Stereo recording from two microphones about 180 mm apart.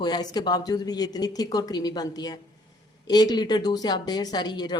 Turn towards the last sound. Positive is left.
turn(degrees=25)  # may be behind; listen again after turning